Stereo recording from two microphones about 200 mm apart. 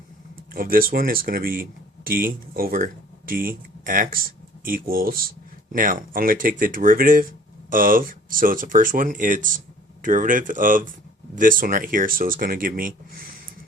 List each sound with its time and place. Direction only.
0.5 s speech: 45° right (ahead or behind)